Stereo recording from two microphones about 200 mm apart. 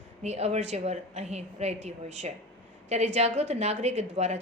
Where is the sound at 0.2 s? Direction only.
35° right (ahead or behind).